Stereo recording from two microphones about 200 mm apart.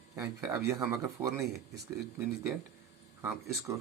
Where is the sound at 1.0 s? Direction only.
15° right (ahead or behind).